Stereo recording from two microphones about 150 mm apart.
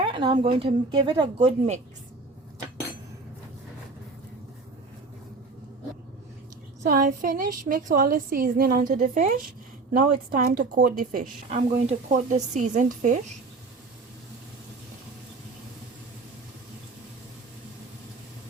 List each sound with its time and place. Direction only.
0.0 s a sound: 35° right (ahead or behind)
0.4 s speech: 35° right (ahead or behind)
6.8 s a woman's voice: 60° right (ahead or behind)